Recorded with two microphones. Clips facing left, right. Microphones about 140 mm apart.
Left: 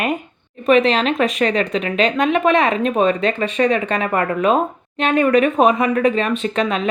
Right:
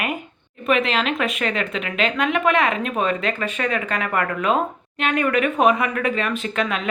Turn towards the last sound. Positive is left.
turn(degrees=30)  # may be behind; listen again after turning